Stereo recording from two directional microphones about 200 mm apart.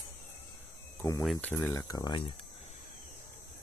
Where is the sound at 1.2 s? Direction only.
5° left (ahead or behind).